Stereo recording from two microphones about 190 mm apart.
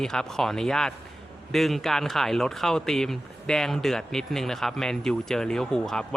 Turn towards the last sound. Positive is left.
turn(degrees=0)  # may be behind; listen again after turning